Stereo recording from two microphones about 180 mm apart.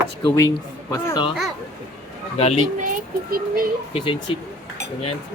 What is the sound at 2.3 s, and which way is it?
Speech, 35° left (ahead or behind).